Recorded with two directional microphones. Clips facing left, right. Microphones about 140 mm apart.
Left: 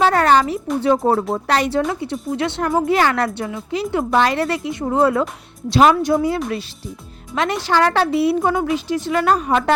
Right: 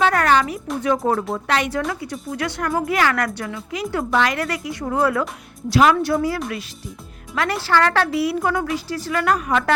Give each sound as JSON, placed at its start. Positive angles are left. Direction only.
{"t": 0.0, "sound": "a woman's voice", "side_deg": 30}